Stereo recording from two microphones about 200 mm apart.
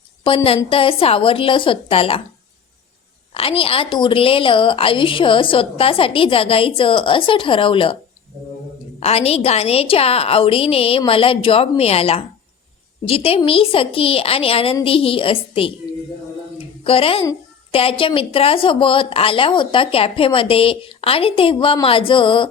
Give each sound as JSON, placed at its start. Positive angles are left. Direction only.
{"t": 0.3, "sound": "a woman's voice", "side_deg": 30}
{"t": 3.3, "sound": "a woman's voice", "side_deg": 30}
{"t": 9.0, "sound": "a woman's voice", "side_deg": 30}
{"t": 16.8, "sound": "a woman's voice", "side_deg": 30}